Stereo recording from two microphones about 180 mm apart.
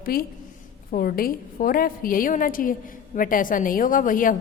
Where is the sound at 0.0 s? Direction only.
55° left (ahead or behind).